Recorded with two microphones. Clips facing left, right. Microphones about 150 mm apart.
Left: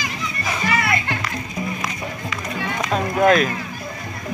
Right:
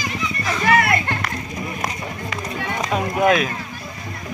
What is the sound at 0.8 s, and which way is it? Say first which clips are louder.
Music: right 3 dB; 50° right (ahead or behind).